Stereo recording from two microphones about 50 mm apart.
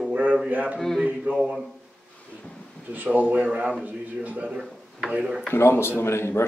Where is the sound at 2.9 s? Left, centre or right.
Right.